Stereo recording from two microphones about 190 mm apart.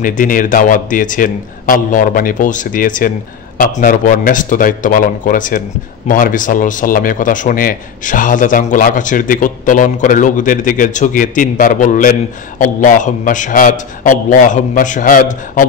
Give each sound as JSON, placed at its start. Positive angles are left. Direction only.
{"t": 0.0, "sound": "speech", "side_deg": 45}